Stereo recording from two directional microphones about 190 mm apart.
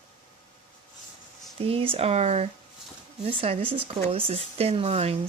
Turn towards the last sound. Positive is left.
turn(degrees=-30)  # may be behind; listen again after turning